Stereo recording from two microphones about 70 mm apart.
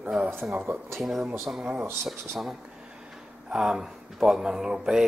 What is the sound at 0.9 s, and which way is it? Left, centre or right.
Speech, centre.